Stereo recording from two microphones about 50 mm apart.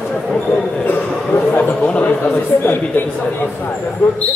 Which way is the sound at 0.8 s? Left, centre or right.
Left.